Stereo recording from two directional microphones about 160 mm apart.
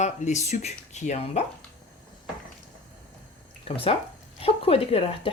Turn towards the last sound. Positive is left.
turn(degrees=40)  # may be behind; listen again after turning